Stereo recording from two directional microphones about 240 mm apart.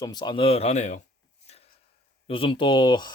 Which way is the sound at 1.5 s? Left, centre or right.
Left.